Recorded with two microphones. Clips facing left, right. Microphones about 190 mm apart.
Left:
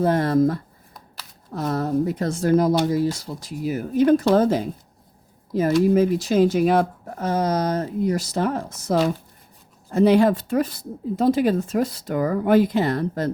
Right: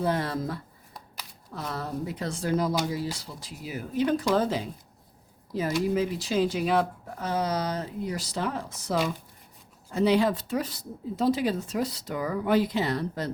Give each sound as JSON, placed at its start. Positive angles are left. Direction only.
{"t": 0.0, "sound": "speech", "side_deg": 50}